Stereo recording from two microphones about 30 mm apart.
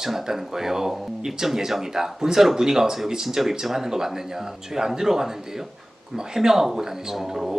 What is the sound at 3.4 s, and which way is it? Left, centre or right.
Speech, centre.